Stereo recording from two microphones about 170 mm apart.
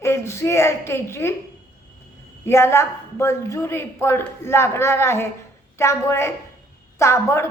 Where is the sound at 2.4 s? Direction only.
15° left (ahead or behind).